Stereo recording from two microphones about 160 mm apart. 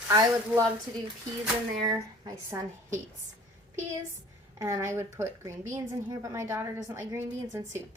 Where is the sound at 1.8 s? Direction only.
25° right (ahead or behind).